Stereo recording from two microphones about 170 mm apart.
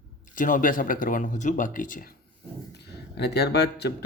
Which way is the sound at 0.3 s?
50° left (ahead or behind).